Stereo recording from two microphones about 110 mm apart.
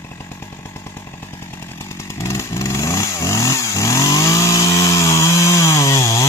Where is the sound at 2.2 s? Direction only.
25° left (ahead or behind).